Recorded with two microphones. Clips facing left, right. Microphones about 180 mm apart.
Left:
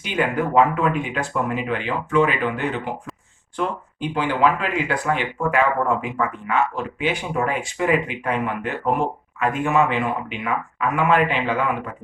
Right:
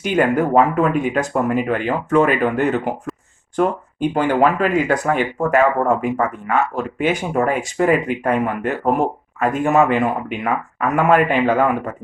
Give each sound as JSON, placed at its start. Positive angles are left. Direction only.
{"t": 0.0, "sound": "speech", "side_deg": -45}